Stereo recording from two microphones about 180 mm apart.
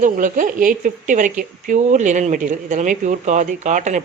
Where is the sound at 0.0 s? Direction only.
45° right (ahead or behind).